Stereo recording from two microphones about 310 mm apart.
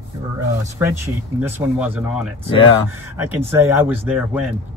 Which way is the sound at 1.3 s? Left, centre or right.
Centre.